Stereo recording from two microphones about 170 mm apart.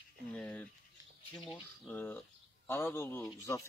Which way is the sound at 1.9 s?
10° left (ahead or behind).